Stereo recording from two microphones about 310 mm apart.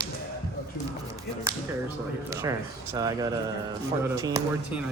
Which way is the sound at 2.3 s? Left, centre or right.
Centre.